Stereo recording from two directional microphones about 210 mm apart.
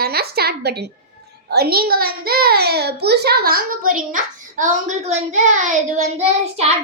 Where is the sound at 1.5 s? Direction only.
50° right (ahead or behind).